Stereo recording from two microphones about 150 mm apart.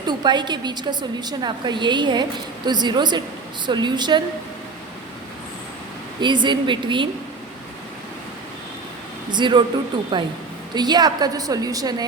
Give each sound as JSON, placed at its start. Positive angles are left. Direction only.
{"t": 0.1, "sound": "a woman's voice", "side_deg": -30}
{"t": 6.1, "sound": "a woman's voice", "side_deg": -30}
{"t": 9.3, "sound": "a woman's voice", "side_deg": -30}